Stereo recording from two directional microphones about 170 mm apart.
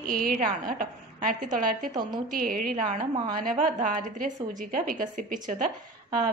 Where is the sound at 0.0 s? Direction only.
55° right (ahead or behind).